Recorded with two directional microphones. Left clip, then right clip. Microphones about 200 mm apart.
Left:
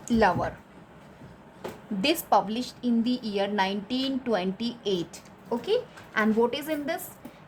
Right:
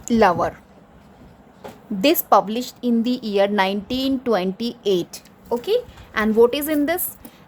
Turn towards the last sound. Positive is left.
turn(degrees=-35)  # may be behind; listen again after turning